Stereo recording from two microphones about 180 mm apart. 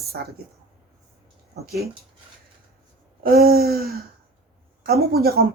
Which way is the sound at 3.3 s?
60° right (ahead or behind).